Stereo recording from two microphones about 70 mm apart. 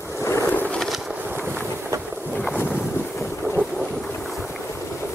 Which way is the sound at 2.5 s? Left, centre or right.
Left.